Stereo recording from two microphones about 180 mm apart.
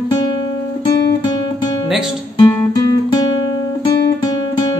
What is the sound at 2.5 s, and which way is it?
Guitar, 20° left (ahead or behind).